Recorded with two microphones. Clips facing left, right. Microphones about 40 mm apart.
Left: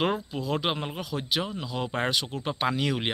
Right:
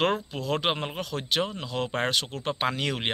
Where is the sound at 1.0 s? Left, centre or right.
Right.